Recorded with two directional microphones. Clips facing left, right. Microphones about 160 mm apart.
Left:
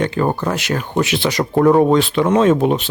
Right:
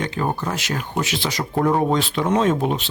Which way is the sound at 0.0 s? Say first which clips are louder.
Left 6 dB; 60° left (ahead or behind).